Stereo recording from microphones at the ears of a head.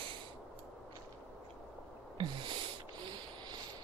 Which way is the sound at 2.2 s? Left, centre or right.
Right.